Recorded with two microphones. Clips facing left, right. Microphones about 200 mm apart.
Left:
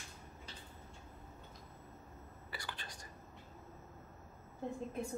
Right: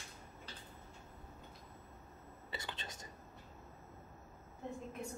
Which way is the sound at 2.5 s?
25° right (ahead or behind).